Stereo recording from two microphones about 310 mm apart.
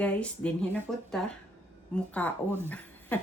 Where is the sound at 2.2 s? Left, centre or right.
Centre.